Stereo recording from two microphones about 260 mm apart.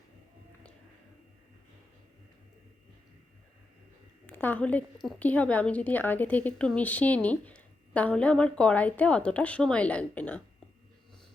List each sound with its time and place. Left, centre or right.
4.3 s a woman's voice: centre